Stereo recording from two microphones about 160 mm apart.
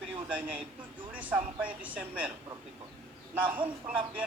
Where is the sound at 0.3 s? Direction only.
10° right (ahead or behind).